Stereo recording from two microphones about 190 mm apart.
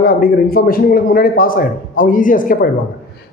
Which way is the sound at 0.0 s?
50° left (ahead or behind).